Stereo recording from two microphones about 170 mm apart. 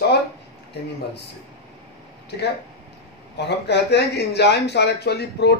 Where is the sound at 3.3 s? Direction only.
80° left.